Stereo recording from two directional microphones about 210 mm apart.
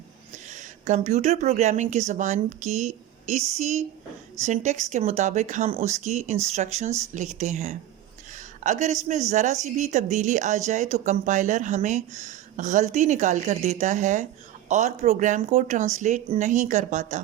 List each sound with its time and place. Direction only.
0.4 s speech: 35° right (ahead or behind)